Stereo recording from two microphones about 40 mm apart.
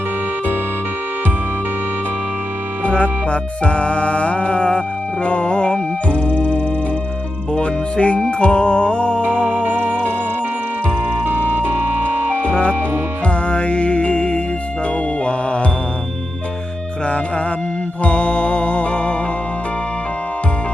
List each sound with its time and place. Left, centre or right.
2.8 s music: left
9.3 s music: right
11.3 s music: right
12.4 s music: left
18.0 s music: left